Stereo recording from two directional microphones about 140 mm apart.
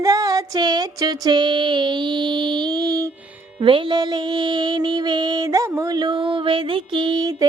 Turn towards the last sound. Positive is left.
turn(degrees=-25)  # may be behind; listen again after turning